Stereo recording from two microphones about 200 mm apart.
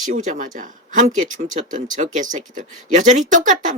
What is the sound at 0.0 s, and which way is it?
A man's voice, 40° right (ahead or behind).